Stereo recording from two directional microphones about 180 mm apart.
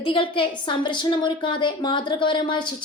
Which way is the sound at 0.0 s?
30° left (ahead or behind).